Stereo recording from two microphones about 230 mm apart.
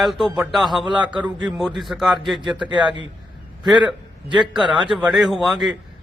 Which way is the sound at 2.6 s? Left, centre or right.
Centre.